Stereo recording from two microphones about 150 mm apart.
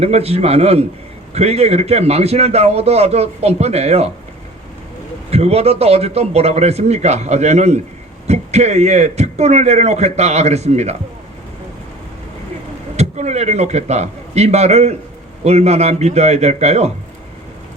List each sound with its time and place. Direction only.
0.0 s a man's voice: 45° right (ahead or behind)
5.3 s a man's voice: 45° right (ahead or behind)
13.0 s a man's voice: 45° right (ahead or behind)